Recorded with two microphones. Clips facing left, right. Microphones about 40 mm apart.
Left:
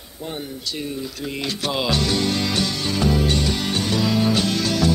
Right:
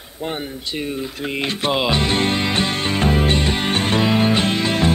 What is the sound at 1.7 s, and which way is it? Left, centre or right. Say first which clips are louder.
Music: right 3 dB; right.